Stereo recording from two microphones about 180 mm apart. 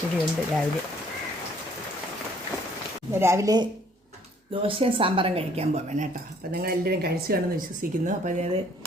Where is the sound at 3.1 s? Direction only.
15° right (ahead or behind); by 6.1 s 40° right (ahead or behind).